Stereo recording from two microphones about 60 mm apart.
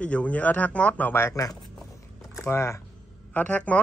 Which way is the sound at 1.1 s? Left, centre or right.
Left.